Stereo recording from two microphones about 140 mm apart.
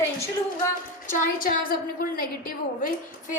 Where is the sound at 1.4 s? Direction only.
90° left.